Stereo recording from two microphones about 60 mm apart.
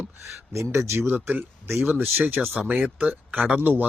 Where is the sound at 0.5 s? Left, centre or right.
Right.